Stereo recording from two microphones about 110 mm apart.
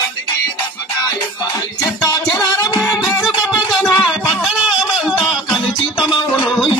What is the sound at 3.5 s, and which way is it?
Music, centre (ahead or behind).